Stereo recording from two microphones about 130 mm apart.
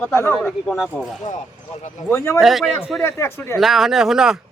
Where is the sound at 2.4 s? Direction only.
Centre (ahead or behind).